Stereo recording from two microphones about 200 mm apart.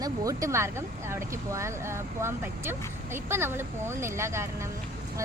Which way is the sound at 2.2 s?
10° right (ahead or behind).